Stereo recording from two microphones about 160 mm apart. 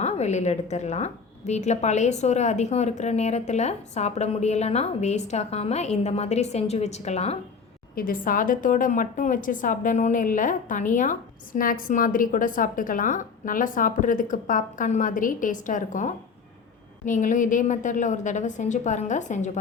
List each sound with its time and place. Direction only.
0.0 s a woman's voice: 45° left (ahead or behind)
7.9 s a woman's voice: 60° left (ahead or behind)